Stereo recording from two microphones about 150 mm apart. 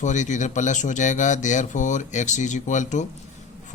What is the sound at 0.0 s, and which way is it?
Speech, 55° left (ahead or behind).